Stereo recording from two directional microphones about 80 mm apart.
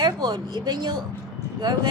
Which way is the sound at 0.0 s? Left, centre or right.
Right.